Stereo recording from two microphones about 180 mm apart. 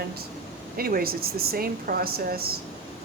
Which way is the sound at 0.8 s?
55° right (ahead or behind).